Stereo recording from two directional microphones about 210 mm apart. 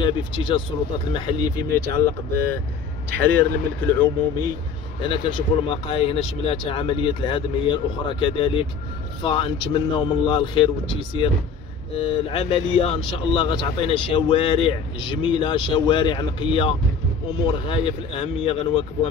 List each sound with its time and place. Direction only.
0.0 s speech: 25° left (ahead or behind); by 4.1 s 5° left (ahead or behind)
5.0 s speech: 25° left (ahead or behind)